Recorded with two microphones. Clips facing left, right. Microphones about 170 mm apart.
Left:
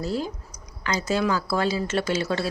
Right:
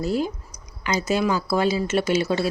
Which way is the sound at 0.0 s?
15° right (ahead or behind).